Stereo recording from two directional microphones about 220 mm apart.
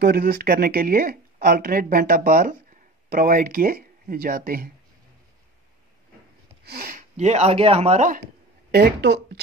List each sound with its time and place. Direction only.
0.0 s speech: 45° right (ahead or behind)
6.6 s speech: 40° right (ahead or behind)
8.7 s speech: 50° right (ahead or behind)